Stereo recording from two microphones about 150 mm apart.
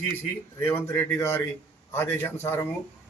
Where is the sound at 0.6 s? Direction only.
15° left (ahead or behind).